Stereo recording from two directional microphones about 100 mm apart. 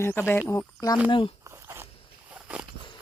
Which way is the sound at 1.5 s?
25° right (ahead or behind).